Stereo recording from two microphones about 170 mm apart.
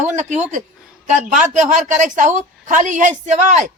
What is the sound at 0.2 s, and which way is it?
Speech, 45° right (ahead or behind).